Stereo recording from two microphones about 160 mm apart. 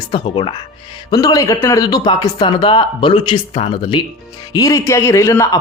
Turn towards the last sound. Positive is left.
turn(degrees=15)  # may be behind; listen again after turning